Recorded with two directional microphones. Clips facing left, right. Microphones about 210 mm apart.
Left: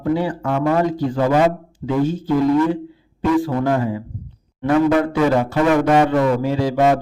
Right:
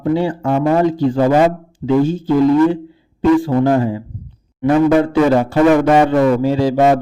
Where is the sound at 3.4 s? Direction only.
30° right (ahead or behind).